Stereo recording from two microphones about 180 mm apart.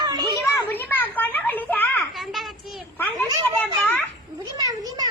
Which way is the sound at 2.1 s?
Centre (ahead or behind).